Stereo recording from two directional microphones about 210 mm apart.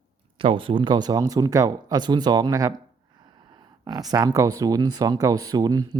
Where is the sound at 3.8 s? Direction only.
20° right (ahead or behind).